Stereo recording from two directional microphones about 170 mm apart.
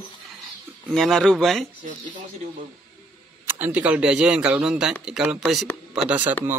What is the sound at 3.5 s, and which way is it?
A man's voice, 10° right (ahead or behind).